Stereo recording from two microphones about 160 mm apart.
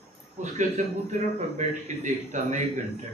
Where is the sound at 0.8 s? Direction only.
50° right (ahead or behind).